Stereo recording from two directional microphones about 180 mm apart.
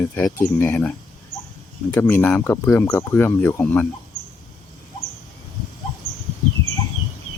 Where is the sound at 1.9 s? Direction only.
10° left (ahead or behind).